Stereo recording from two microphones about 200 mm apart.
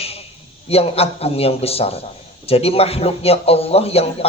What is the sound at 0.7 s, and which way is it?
A man's voice, 30° left (ahead or behind).